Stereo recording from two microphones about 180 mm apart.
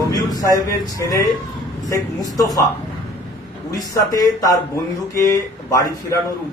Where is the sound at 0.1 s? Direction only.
20° left (ahead or behind).